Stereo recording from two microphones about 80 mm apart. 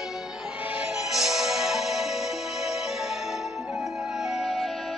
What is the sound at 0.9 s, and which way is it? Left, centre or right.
Music, centre.